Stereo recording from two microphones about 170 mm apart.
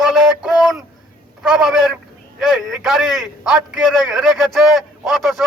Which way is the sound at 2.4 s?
Centre (ahead or behind).